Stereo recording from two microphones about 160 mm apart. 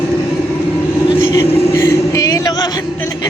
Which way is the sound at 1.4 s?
20° left (ahead or behind).